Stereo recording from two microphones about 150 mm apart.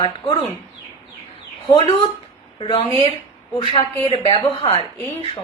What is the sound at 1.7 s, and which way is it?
Speech, 35° left (ahead or behind).